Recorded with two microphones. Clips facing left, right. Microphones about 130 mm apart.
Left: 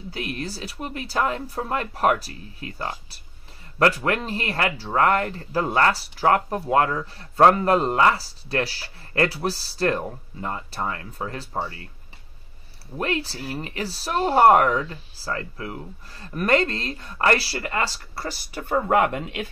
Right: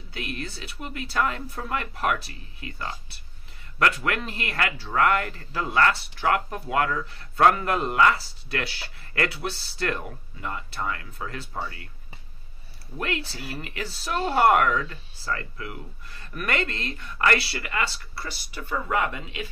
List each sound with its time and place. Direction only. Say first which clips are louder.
0.1 s speech: left 3 dB; 35° left (ahead or behind)
12.9 s speech: left 4 dB; 30° left (ahead or behind); by 19.4 s 55° left (ahead or behind)